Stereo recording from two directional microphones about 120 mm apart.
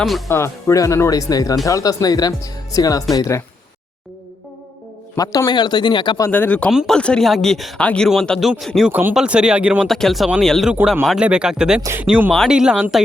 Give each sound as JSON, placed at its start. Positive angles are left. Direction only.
{"t": 0.3, "sound": "speech", "side_deg": 20}
{"t": 5.1, "sound": "speech", "side_deg": 30}
{"t": 6.3, "sound": "speech", "side_deg": 15}
{"t": 6.7, "sound": "speech", "side_deg": -5}
{"t": 6.9, "sound": "speech", "side_deg": 5}
{"t": 8.9, "sound": "speech", "side_deg": -15}
{"t": 9.8, "sound": "speech", "side_deg": 0}
{"t": 10.7, "sound": "speech", "side_deg": -10}
{"t": 11.8, "sound": "speech", "side_deg": -20}
{"t": 12.3, "sound": "speech", "side_deg": 0}